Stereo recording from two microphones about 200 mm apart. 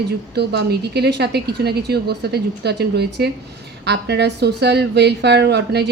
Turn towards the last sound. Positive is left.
turn(degrees=-55)  # may be behind; listen again after turning